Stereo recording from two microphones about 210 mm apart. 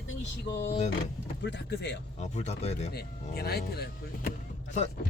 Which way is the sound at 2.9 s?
50° left (ahead or behind).